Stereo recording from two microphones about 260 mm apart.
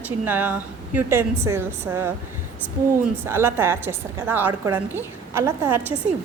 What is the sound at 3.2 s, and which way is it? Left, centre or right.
A woman's voice, centre.